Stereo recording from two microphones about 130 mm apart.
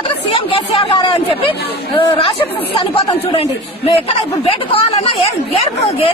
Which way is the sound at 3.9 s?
50° left (ahead or behind).